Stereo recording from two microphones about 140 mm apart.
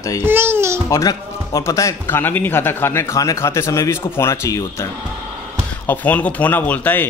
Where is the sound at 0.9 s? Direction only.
25° left (ahead or behind).